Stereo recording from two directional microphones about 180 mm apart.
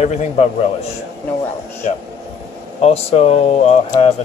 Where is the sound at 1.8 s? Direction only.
45° left (ahead or behind).